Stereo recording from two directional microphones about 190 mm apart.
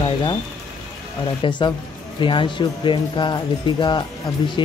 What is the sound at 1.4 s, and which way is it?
Speech, 25° left (ahead or behind).